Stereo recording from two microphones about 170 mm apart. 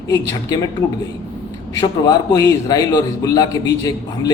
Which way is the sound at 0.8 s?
15° left (ahead or behind).